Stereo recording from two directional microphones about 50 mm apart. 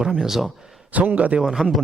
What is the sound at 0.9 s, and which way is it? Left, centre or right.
Speech, right.